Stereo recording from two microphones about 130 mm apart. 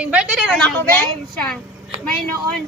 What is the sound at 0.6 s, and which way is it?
A woman's voice, 10° left (ahead or behind).